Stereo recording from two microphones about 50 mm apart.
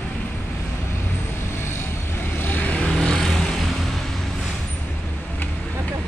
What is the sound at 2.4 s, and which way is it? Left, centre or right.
Vehicle, left.